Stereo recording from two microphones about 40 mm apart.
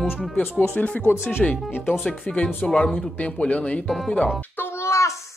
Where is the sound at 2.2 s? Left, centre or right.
Left.